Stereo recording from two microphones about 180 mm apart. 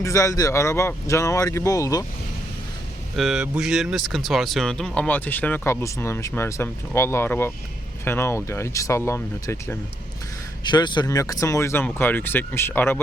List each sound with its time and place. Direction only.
0.0 s speech: 15° left (ahead or behind)
3.2 s speech: 5° right (ahead or behind); by 9.7 s 15° left (ahead or behind)
10.6 s speech: 25° left (ahead or behind)